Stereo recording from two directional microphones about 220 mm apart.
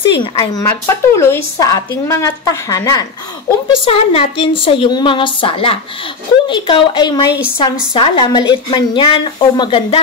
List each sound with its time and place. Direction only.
0.1 s a woman's voice: 20° left (ahead or behind)
0.7 s a woman's voice: 10° left (ahead or behind)